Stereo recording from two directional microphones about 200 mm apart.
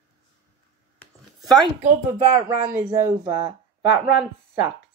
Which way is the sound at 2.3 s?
15° right (ahead or behind).